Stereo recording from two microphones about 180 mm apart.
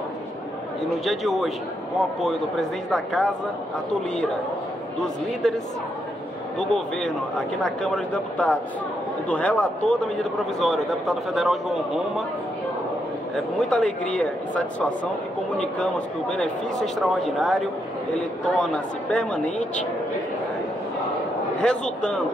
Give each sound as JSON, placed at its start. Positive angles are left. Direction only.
{"t": 1.0, "sound": "a man's voice", "side_deg": 0}
{"t": 5.0, "sound": "a man's voice", "side_deg": 0}
{"t": 6.6, "sound": "a man's voice", "side_deg": 5}
{"t": 13.6, "sound": "a man's voice", "side_deg": 5}
{"t": 21.5, "sound": "a man's voice", "side_deg": 5}